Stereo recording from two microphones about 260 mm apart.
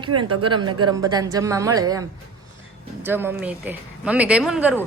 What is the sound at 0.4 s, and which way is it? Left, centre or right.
A woman's voice, centre.